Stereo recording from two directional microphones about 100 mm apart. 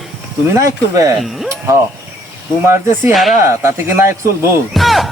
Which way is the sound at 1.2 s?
Centre (ahead or behind).